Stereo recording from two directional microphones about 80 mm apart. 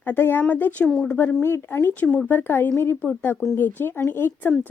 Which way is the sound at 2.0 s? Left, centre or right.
Centre.